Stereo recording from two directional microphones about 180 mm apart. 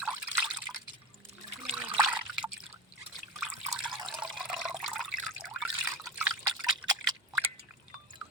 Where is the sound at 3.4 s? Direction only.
5° right (ahead or behind).